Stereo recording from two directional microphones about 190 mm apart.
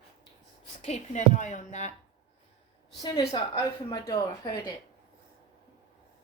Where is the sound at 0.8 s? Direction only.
35° left (ahead or behind).